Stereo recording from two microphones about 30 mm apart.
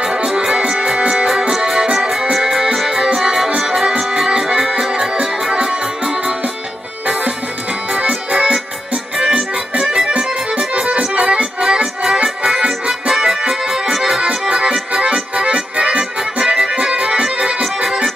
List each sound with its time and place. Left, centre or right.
0.0 s music: right
1.5 s music: right
7.9 s accordion: right
9.3 s accordion: right
10.7 s accordion: right
11.6 s music: right
14.5 s accordion: right
16.4 s music: right
17.0 s accordion: right